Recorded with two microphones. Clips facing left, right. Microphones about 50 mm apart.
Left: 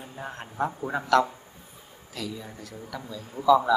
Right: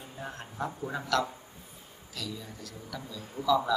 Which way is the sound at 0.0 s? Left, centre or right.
Left.